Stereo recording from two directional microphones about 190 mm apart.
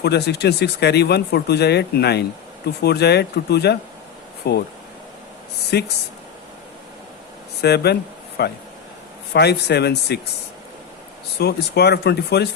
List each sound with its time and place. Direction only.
0.0 s speech: 60° left (ahead or behind)
5.7 s speech: 60° left (ahead or behind)
7.6 s speech: 60° left (ahead or behind)
11.3 s speech: 60° left (ahead or behind)